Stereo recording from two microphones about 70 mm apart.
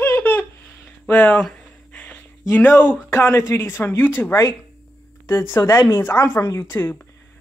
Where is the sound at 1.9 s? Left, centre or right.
Left.